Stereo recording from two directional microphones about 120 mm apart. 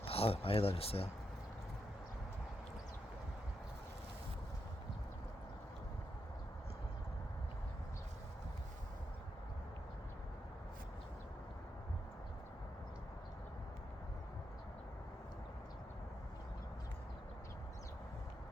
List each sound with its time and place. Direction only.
0.1 s speech: 55° left (ahead or behind)